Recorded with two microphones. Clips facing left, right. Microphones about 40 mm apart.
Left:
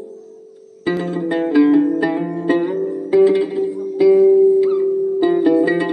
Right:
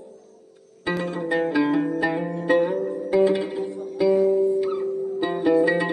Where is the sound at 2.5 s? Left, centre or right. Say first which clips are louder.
Left 3 dB; left.